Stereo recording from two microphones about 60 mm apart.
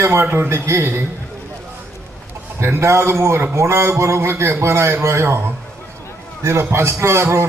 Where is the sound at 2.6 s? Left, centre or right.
Right.